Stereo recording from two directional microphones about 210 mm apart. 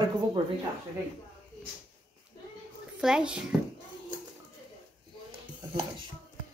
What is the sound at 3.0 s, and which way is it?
Speech, 5° right (ahead or behind).